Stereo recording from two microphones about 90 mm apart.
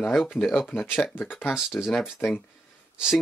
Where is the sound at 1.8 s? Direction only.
10° left (ahead or behind).